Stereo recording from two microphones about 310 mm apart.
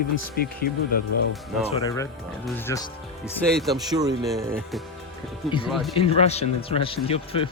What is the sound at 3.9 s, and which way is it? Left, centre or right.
Speech, centre.